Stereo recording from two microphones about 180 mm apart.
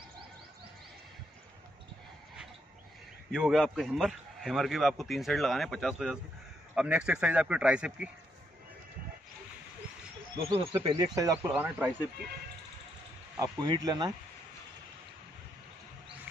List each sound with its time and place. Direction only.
3.3 s a man's voice: centre (ahead or behind)
10.3 s speech: 30° right (ahead or behind)
11.1 s speech: 15° right (ahead or behind)
13.4 s speech: 20° right (ahead or behind)